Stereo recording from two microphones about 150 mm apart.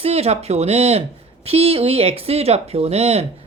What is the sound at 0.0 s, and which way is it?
Speech, 45° right (ahead or behind).